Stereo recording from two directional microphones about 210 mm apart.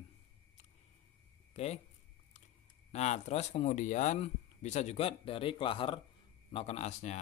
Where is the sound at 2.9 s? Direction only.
30° left (ahead or behind).